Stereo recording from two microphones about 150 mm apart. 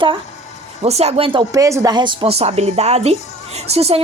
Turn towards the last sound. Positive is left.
turn(degrees=-40)  # may be behind; listen again after turning